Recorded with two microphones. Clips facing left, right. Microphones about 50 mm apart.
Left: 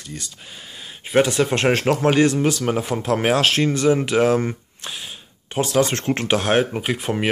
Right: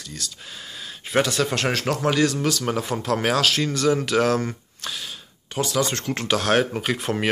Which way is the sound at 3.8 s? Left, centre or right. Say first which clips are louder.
Left 2 dB; left.